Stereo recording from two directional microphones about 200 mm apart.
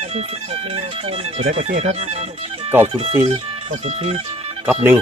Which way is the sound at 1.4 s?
30° right (ahead or behind).